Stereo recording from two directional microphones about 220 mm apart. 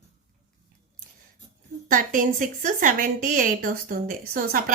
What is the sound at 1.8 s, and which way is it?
A woman's voice, 40° right (ahead or behind).